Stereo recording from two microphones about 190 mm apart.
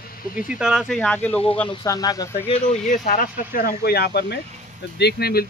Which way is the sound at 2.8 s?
45° left (ahead or behind).